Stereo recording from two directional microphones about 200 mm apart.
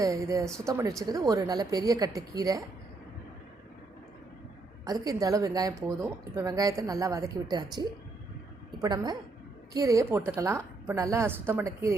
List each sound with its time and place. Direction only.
0.0 s a woman's voice: 15° right (ahead or behind)
4.9 s a woman's voice: 20° right (ahead or behind)